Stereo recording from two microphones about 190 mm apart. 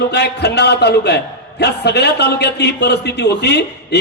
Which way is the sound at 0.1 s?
60° left (ahead or behind).